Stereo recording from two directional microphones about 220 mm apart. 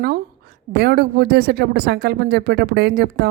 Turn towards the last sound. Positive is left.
turn(degrees=-45)  # may be behind; listen again after turning